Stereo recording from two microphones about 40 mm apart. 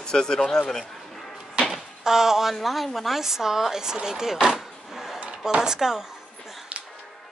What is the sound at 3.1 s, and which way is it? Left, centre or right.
Speech, centre.